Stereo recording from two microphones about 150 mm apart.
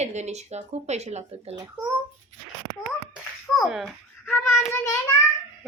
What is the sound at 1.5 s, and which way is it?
Speech, 15° right (ahead or behind).